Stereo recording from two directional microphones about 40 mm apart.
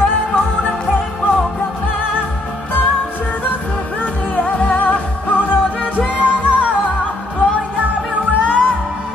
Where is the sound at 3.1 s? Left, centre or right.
Left.